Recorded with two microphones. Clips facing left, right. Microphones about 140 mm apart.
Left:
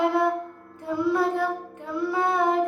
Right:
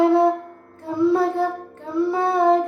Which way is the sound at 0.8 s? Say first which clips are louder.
Right 5 dB; 30° right (ahead or behind).